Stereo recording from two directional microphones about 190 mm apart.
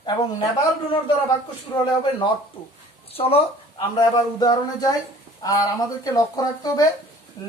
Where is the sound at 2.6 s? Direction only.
25° left (ahead or behind).